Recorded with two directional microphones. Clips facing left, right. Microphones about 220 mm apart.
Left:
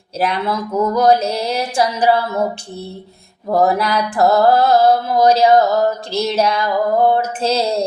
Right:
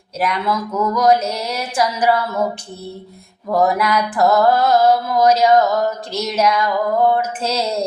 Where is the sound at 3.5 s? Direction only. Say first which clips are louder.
Left 1 dB; 30° left (ahead or behind).